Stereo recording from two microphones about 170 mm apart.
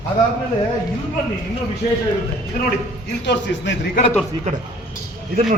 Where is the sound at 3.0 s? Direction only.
85° left.